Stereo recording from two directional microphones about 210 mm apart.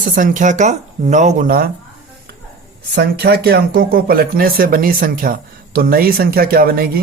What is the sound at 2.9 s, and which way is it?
Speech, 50° right (ahead or behind).